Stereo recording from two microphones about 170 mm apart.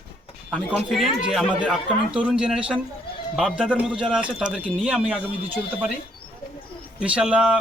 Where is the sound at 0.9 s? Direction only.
Centre (ahead or behind).